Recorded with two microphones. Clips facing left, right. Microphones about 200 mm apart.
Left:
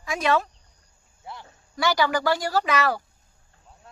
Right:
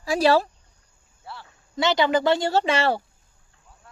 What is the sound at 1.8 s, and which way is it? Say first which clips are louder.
A woman's voice: right 3 dB; 20° right (ahead or behind).